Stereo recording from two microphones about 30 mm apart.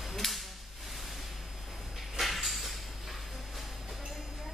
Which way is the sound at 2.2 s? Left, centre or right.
Centre.